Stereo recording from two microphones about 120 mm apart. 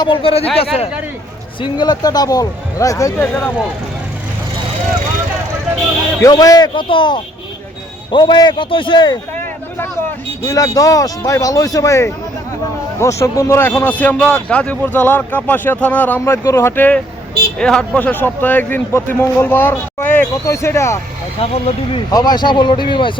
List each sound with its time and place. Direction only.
0.0 s speech: 45° left (ahead or behind)
1.6 s speech: 40° left (ahead or behind)
3.2 s speech: 15° left (ahead or behind)
6.2 s speech: 30° left (ahead or behind)
6.7 s speech: 45° left (ahead or behind)
10.4 s speech: 30° left (ahead or behind)
21.3 s speech: 55° left (ahead or behind)
22.1 s speech: 35° left (ahead or behind)